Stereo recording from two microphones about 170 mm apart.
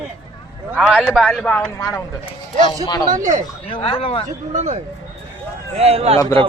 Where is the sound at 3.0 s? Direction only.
50° right (ahead or behind).